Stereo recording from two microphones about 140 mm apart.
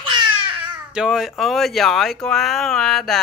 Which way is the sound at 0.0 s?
35° right (ahead or behind).